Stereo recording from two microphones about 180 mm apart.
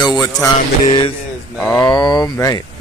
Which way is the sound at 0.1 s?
20° left (ahead or behind).